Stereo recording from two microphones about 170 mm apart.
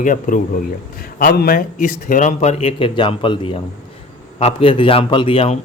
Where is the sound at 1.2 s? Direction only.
65° left (ahead or behind); by 5.5 s 30° left (ahead or behind).